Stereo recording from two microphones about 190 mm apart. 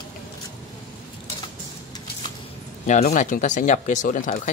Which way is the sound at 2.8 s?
40° left (ahead or behind).